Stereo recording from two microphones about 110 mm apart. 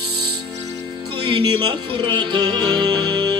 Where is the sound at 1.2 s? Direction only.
45° right (ahead or behind).